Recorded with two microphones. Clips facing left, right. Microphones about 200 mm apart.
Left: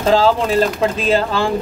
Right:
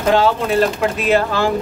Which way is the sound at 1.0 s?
30° left (ahead or behind).